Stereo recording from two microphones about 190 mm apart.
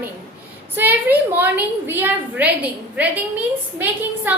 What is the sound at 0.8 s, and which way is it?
A woman's voice, 10° right (ahead or behind).